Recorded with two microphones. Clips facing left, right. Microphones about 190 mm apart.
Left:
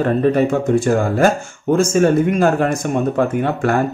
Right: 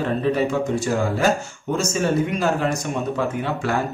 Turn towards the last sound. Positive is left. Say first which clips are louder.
# left 6 dB
turn(degrees=50)  # may be behind; listen again after turning